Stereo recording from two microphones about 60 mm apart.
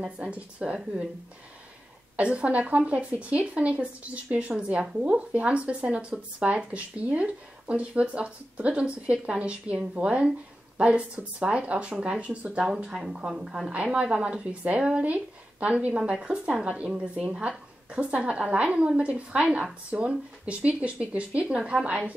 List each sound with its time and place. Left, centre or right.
0.0 s speech: centre
2.1 s speech: centre